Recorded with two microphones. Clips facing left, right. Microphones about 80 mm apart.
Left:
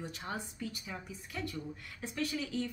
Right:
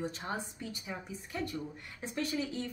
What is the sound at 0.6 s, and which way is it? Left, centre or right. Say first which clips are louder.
Speech: even; right.